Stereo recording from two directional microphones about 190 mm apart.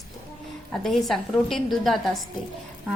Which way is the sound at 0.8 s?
Centre (ahead or behind).